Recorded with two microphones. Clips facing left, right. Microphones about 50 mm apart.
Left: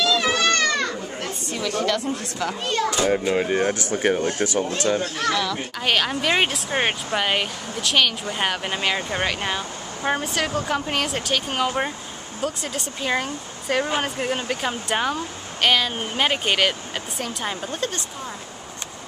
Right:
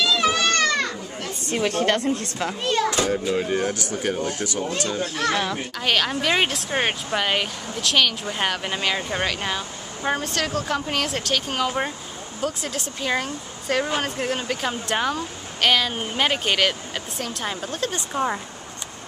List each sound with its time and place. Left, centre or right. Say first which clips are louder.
0.0 s goat: even; centre
1.5 s a woman's voice: right 3 dB; right
3.1 s speech: left 2 dB; left
5.3 s speech: left 2 dB; right
5.8 s a woman's voice: even; centre
18.1 s speech: right 10 dB; right